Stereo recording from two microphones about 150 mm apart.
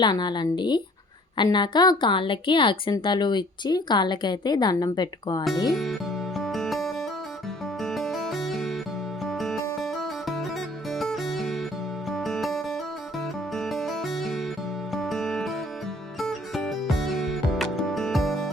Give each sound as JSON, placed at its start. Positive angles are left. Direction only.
{"t": 0.0, "sound": "a woman's voice", "side_deg": 30}
{"t": 5.7, "sound": "music", "side_deg": 0}